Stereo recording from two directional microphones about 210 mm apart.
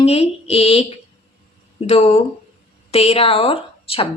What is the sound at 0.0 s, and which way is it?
A woman's voice, 30° left (ahead or behind).